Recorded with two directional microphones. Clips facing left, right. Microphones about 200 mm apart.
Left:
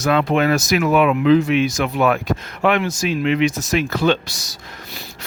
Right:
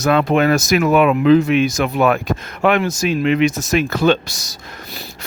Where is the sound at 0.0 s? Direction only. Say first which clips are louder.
Right 2 dB; 45° right (ahead or behind).